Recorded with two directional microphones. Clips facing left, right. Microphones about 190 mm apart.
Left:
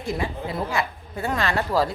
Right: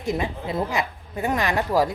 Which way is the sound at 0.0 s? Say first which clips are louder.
Right 1 dB; 20° right (ahead or behind).